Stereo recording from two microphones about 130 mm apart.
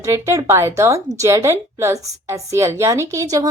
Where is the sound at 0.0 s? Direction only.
25° right (ahead or behind).